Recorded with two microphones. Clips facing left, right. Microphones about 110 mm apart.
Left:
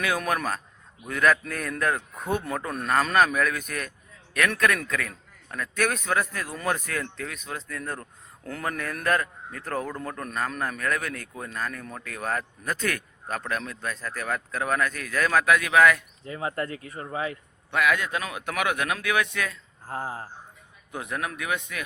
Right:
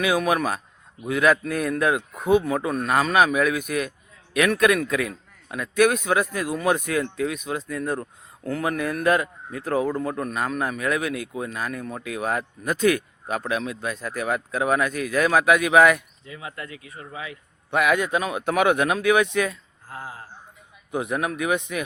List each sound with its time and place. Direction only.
0.0 s a man's voice: 10° right (ahead or behind)
16.2 s speech: 40° left (ahead or behind)
17.7 s speech: 20° right (ahead or behind)
19.9 s speech: 35° left (ahead or behind)
20.9 s speech: 20° right (ahead or behind)